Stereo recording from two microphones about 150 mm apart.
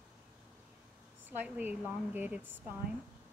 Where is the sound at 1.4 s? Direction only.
10° right (ahead or behind).